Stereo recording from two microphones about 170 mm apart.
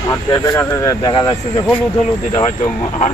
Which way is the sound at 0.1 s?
20° left (ahead or behind).